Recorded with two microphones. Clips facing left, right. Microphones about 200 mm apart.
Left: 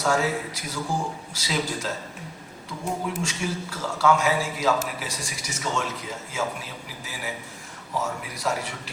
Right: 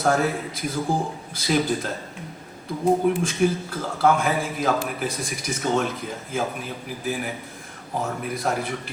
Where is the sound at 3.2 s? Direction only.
55° right (ahead or behind).